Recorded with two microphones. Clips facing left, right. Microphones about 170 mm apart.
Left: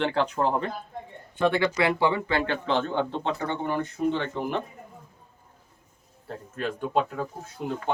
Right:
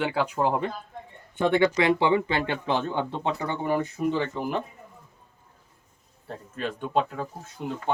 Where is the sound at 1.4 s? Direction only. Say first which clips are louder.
Right 2 dB; 20° right (ahead or behind); by 4.6 s 5° right (ahead or behind).